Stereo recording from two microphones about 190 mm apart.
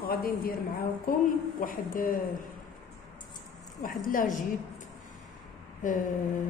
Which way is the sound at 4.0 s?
45° left (ahead or behind).